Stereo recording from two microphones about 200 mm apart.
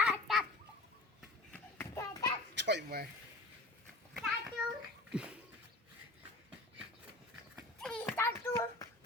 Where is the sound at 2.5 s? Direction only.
60° right (ahead or behind).